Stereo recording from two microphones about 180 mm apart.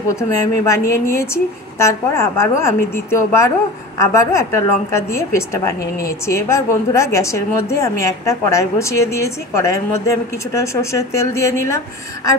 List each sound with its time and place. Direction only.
0.1 s a woman's voice: 15° left (ahead or behind)